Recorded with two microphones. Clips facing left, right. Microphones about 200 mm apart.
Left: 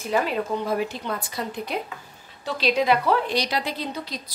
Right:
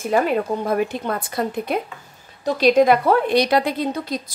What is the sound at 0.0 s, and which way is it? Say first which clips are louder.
A woman's voice: right 5 dB; 50° right (ahead or behind).